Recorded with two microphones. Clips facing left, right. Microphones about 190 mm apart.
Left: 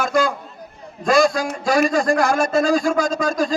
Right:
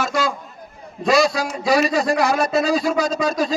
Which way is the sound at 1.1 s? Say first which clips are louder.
Left 1 dB; 50° left (ahead or behind).